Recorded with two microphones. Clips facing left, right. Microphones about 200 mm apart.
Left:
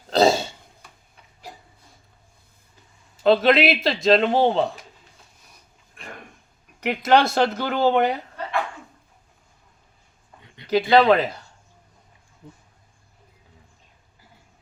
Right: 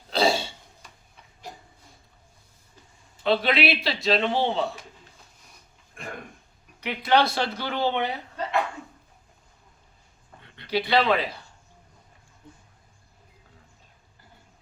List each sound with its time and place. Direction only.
0.2 s throat clearing: 45° left (ahead or behind)
3.2 s speech: 45° left (ahead or behind)
6.9 s speech: 45° left (ahead or behind)
10.4 s dog: 15° left (ahead or behind)
10.7 s speech: 45° left (ahead or behind)